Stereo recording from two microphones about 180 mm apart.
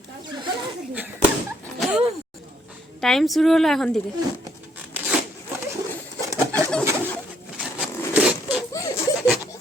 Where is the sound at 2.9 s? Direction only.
Centre (ahead or behind).